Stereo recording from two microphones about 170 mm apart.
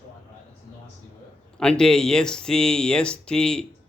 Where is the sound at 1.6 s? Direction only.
5° left (ahead or behind).